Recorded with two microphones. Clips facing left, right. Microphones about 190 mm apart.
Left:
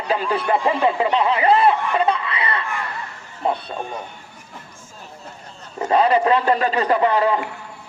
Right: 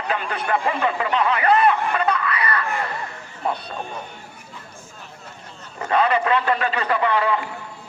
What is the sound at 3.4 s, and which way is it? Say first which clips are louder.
Speech: left 3 dB; 25° left (ahead or behind).